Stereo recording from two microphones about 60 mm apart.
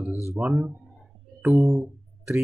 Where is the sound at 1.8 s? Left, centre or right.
Centre.